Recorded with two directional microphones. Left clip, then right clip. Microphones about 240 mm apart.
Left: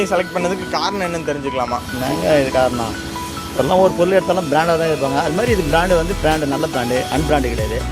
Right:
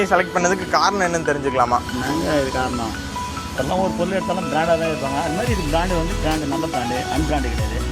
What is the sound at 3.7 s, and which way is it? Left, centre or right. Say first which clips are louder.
Speech: left 8 dB; left.